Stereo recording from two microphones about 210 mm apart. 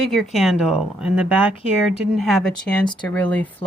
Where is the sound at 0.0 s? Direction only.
Centre (ahead or behind).